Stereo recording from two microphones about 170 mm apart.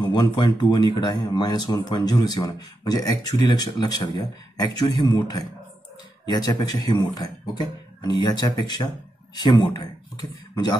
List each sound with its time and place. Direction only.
0.0 s a man's voice: 25° left (ahead or behind)